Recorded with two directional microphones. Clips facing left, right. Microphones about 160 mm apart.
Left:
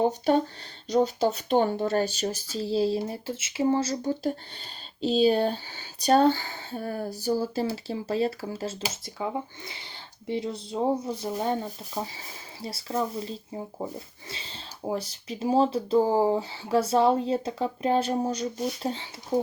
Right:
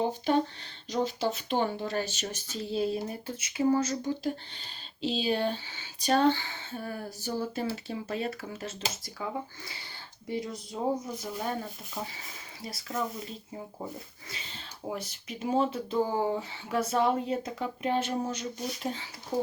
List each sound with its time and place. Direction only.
1.5 s speech: 45° left (ahead or behind); by 11.5 s 30° left (ahead or behind)
12.6 s speech: 30° left (ahead or behind)
19.3 s speech: 15° left (ahead or behind)